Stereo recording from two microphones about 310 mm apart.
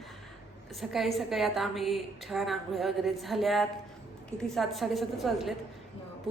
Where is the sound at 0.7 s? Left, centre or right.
Centre.